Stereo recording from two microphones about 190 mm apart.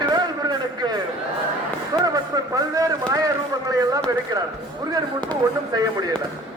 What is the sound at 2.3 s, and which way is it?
Speech, 20° right (ahead or behind).